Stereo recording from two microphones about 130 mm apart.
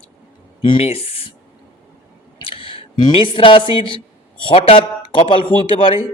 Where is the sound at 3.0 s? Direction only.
40° left (ahead or behind).